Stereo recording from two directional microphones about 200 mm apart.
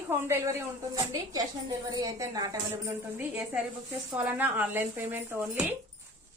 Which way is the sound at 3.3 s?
5° right (ahead or behind).